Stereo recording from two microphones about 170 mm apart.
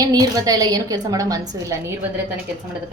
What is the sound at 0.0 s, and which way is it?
A woman's voice, 20° right (ahead or behind).